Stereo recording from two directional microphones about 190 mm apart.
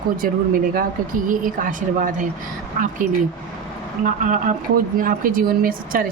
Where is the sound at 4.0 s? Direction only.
40° right (ahead or behind).